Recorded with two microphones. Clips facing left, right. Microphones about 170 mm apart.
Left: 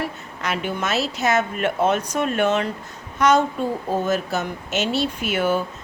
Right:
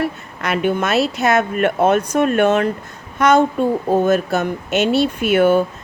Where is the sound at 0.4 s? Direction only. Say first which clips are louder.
Right 7 dB; 55° right (ahead or behind).